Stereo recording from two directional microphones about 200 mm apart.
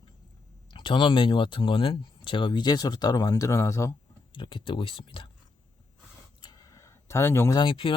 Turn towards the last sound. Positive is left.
turn(degrees=25)  # may be behind; listen again after turning